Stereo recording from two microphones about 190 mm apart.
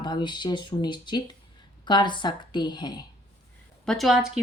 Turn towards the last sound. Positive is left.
turn(degrees=-5)  # may be behind; listen again after turning